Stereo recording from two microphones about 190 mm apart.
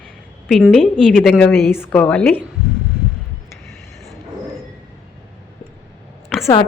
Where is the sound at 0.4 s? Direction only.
Centre (ahead or behind).